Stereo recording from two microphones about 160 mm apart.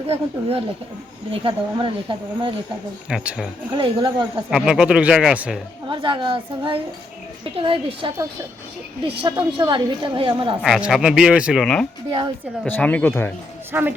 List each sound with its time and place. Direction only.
0.1 s a woman's voice: 35° right (ahead or behind)
3.1 s speech: 5° right (ahead or behind)
3.7 s a woman's voice: 30° right (ahead or behind)
4.5 s speech: 5° right (ahead or behind)
5.9 s a woman's voice: 30° right (ahead or behind)
9.2 s a woman's voice: 30° right (ahead or behind)
10.6 s speech: 5° right (ahead or behind)
11.6 s speech: 5° left (ahead or behind)
13.7 s speech: 10° right (ahead or behind)